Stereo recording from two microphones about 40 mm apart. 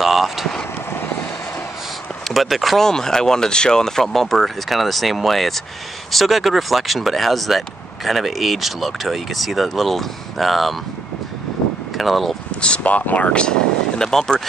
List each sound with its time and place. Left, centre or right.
0.0 s vehicle: centre
2.2 s speech: centre
2.8 s speech: centre
12.0 s speech: centre
12.4 s a sound: left
12.8 s speech: left; by 14.4 s centre